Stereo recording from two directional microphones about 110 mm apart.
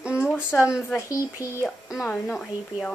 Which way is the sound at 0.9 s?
30° left (ahead or behind).